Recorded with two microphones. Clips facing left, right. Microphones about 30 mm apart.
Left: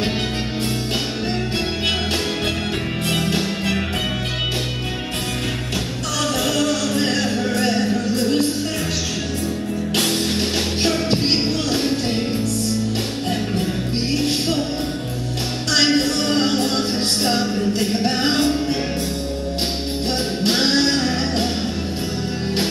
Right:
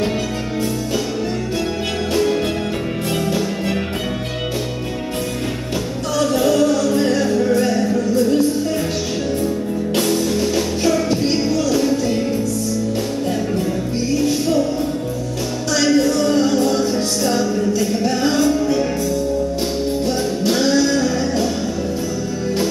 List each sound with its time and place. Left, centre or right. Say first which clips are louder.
3.3 s music: right 1 dB; left
6.1 s music: right 5 dB; left
9.9 s music: right 2 dB; left
14.1 s music: right 4 dB; left
15.7 s music: right 2 dB; left
20.4 s music: right 2 dB; left